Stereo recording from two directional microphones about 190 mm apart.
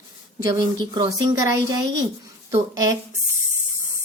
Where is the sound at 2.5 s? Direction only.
15° right (ahead or behind).